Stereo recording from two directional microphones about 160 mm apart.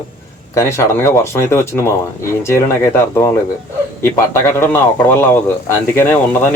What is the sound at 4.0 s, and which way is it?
Speech, 15° left (ahead or behind).